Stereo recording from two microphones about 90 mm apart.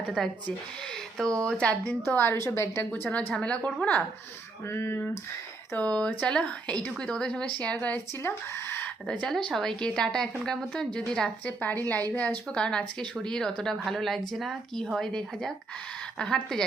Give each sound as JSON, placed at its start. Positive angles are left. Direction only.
{"t": 0.2, "sound": "a woman's voice", "side_deg": 5}
{"t": 1.5, "sound": "a woman's voice", "side_deg": 10}
{"t": 2.0, "sound": "a woman's voice", "side_deg": 25}
{"t": 2.9, "sound": "a woman's voice", "side_deg": 15}
{"t": 4.6, "sound": "a woman's voice", "side_deg": 25}
{"t": 5.7, "sound": "a woman's voice", "side_deg": 10}
{"t": 8.2, "sound": "speech", "side_deg": 30}
{"t": 9.0, "sound": "a woman's voice", "side_deg": 5}
{"t": 11.4, "sound": "a woman's voice", "side_deg": 20}